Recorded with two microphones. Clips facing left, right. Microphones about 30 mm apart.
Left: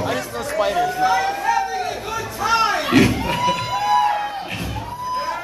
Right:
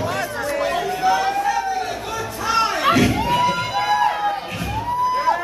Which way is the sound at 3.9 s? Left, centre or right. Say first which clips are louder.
Left 2 dB; centre.